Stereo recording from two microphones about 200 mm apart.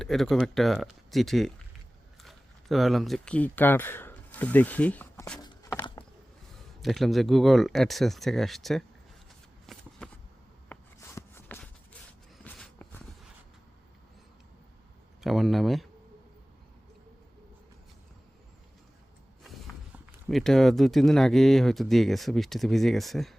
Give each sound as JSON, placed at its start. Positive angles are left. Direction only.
{"t": 0.0, "sound": "speech", "side_deg": 0}
{"t": 5.4, "sound": "a sound", "side_deg": 15}
{"t": 6.8, "sound": "speech", "side_deg": 0}
{"t": 9.7, "sound": "shuffling cards", "side_deg": 0}
{"t": 10.7, "sound": "walk", "side_deg": 10}
{"t": 15.2, "sound": "speech", "side_deg": 0}
{"t": 19.9, "sound": "speech", "side_deg": -5}